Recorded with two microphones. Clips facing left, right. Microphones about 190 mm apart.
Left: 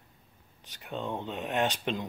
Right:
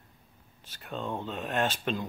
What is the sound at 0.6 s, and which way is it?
Speech, 15° left (ahead or behind).